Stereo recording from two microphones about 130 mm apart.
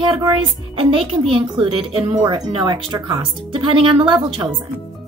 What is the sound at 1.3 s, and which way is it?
Speech, 45° right (ahead or behind).